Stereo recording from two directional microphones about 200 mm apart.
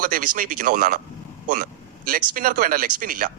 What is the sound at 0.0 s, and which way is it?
Speech, 45° right (ahead or behind).